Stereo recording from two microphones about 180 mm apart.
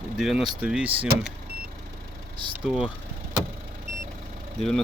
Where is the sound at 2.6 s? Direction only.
5° right (ahead or behind).